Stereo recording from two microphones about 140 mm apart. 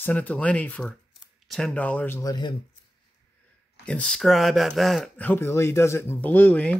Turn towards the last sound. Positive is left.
turn(degrees=10)  # may be behind; listen again after turning